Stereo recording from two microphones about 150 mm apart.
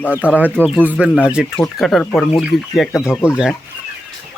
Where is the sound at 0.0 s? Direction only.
10° left (ahead or behind).